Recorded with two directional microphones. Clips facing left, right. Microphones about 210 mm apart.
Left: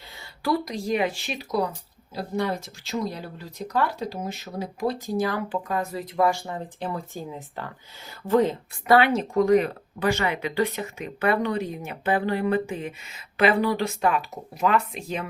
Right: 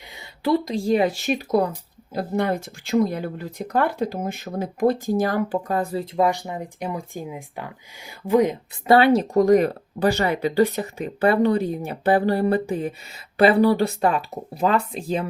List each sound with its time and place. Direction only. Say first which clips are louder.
0.2 s speech: right 4 dB; 25° right (ahead or behind)
8.9 s speech: right 4 dB; 30° right (ahead or behind)